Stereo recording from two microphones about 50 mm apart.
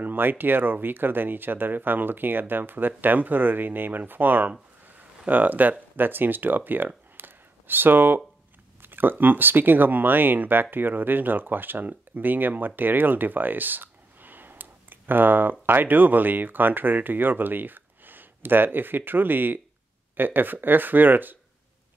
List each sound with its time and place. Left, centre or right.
0.0 s speech: right
7.2 s a sound: right
8.8 s speech: right